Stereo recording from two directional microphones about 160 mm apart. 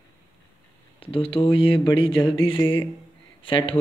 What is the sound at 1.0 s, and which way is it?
Speech, 35° left (ahead or behind).